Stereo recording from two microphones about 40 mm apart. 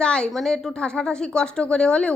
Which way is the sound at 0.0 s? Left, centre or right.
Left.